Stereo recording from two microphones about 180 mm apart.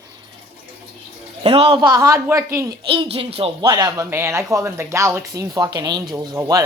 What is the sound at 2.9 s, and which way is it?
Speech, 30° right (ahead or behind).